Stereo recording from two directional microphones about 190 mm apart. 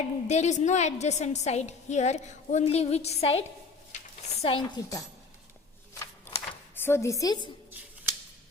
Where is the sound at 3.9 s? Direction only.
35° left (ahead or behind).